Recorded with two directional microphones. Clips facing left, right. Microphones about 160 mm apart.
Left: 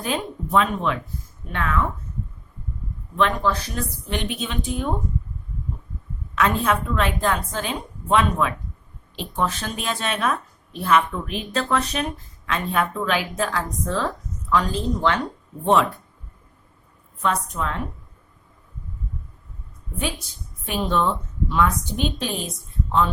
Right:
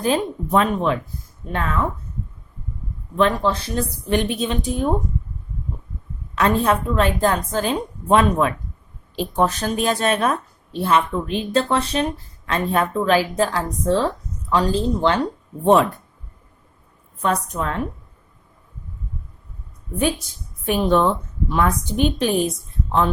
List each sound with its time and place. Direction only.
0.0 s speech: 40° right (ahead or behind)
3.2 s speech: 30° right (ahead or behind)
4.1 s speech: 40° right (ahead or behind)
6.3 s speech: 35° right (ahead or behind)
15.6 s a woman's voice: 40° right (ahead or behind)
17.2 s a woman's voice: 45° right (ahead or behind)
20.7 s a woman's voice: 55° right (ahead or behind)